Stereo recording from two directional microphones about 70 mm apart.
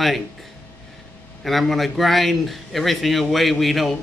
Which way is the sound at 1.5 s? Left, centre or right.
Centre.